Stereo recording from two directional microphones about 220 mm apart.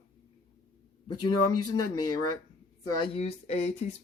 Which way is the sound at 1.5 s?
90° left.